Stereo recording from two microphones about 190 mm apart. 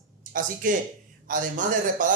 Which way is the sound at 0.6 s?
45° right (ahead or behind).